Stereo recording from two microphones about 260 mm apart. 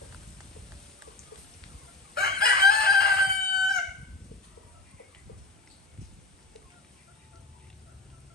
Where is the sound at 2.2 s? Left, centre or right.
Left.